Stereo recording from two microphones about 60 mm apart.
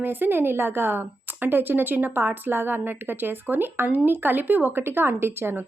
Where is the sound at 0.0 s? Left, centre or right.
Right.